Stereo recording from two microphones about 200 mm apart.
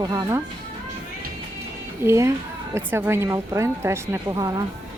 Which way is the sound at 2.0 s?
15° right (ahead or behind).